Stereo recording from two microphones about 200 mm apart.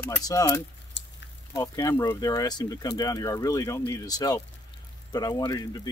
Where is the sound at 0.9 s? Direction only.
60° left (ahead or behind).